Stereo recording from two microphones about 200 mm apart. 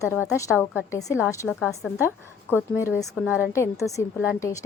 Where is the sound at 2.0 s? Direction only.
10° left (ahead or behind).